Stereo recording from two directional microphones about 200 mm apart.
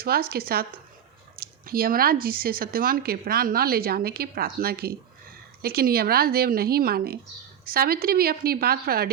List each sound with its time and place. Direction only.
0.0 s speech: 50° right (ahead or behind)
1.4 s a sound: 45° right (ahead or behind)
2.2 s speech: 45° right (ahead or behind)